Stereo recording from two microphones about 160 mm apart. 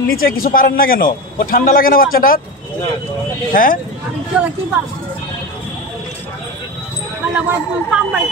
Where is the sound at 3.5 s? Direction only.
60° left (ahead or behind).